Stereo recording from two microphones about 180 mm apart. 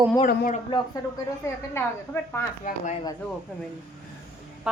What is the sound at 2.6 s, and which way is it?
Speech, 45° left (ahead or behind).